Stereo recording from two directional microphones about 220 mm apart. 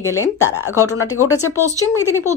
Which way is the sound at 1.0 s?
70° left (ahead or behind).